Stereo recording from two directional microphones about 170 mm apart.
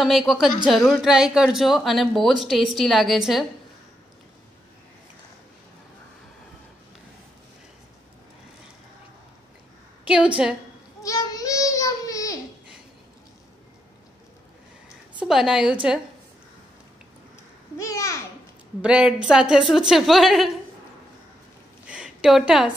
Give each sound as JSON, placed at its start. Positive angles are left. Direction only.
{"t": 0.0, "sound": "a woman's voice", "side_deg": 0}
{"t": 10.0, "sound": "a woman's voice", "side_deg": -5}
{"t": 11.0, "sound": "a sound", "side_deg": 20}
{"t": 15.1, "sound": "a woman's voice", "side_deg": -5}
{"t": 17.7, "sound": "a child's voice", "side_deg": 20}
{"t": 18.8, "sound": "a woman's voice", "side_deg": -5}
{"t": 21.8, "sound": "a sound", "side_deg": -5}